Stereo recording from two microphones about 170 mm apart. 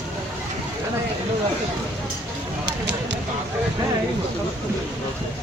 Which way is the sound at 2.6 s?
80° right.